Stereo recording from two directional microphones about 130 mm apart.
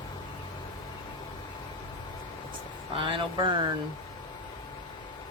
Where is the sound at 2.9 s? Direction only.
40° right (ahead or behind).